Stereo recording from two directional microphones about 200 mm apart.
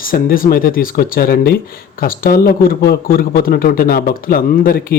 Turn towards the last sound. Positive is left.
turn(degrees=45)  # may be behind; listen again after turning